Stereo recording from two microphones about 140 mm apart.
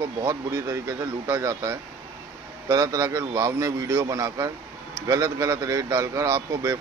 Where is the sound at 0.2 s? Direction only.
20° right (ahead or behind).